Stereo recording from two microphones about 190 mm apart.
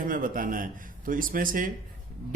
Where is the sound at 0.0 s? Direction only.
45° right (ahead or behind).